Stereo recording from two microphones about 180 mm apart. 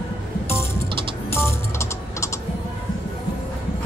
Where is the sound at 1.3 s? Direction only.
15° left (ahead or behind).